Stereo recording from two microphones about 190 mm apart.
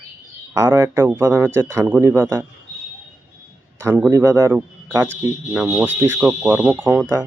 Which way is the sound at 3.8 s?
5° right (ahead or behind).